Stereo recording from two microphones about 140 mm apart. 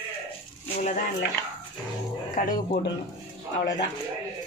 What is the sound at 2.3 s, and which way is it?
Speech, 70° left (ahead or behind).